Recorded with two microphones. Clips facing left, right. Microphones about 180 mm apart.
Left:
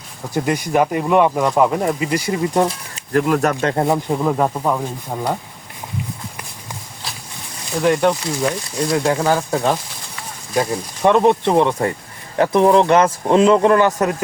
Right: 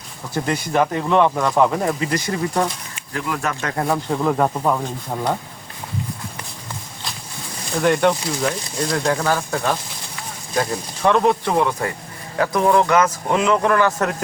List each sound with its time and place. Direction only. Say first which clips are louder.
0.3 s speech: left 2 dB; 15° left (ahead or behind)
2.5 s speech: left 5 dB; 25° left (ahead or behind)
2.9 s speech: left 9 dB; 50° left (ahead or behind)
3.7 s speech: left 4 dB; 25° left (ahead or behind); by 5.4 s 5° left (ahead or behind)
7.8 s speech: left 1 dB; centre (ahead or behind)
9.0 s speech: left 2 dB; 20° left (ahead or behind)